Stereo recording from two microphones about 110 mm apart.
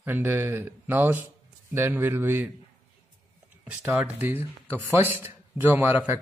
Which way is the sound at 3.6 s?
10° right (ahead or behind).